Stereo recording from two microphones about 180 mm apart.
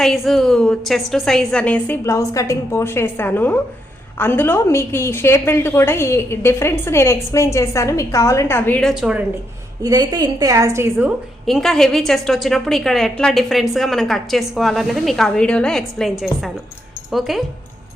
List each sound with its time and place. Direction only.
0.0 s a woman's voice: centre (ahead or behind)
9.8 s a woman's voice: 20° right (ahead or behind)
11.4 s a woman's voice: centre (ahead or behind)